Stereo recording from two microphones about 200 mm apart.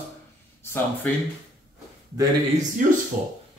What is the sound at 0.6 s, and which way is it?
Speech, 10° left (ahead or behind).